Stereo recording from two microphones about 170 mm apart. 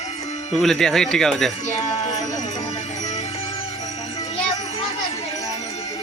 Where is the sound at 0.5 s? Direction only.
Centre (ahead or behind).